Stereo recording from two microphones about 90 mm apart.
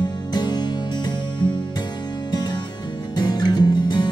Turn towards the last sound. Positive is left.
turn(degrees=55)  # may be behind; listen again after turning